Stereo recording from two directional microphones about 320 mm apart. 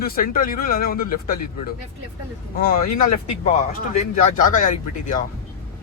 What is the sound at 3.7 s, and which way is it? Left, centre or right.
Speech, left.